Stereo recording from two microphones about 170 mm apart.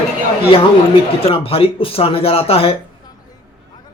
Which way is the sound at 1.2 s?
35° left (ahead or behind).